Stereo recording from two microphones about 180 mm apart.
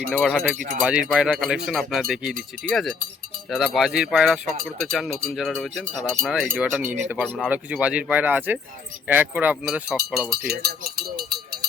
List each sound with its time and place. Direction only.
0.1 s speech: 5° left (ahead or behind)
10.2 s speech: 60° right (ahead or behind)